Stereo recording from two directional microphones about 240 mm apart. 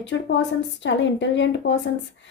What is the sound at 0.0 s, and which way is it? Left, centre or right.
A woman's voice, left.